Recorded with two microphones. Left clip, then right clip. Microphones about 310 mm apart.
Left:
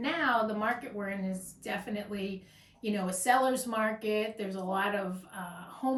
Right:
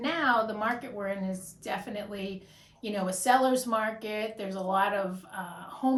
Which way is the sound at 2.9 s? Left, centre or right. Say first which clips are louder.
Right 3 dB; centre.